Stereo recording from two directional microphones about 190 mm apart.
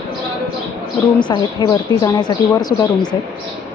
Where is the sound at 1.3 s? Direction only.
20° left (ahead or behind).